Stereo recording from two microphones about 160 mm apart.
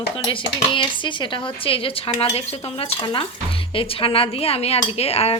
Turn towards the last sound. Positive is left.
turn(degrees=40)  # may be behind; listen again after turning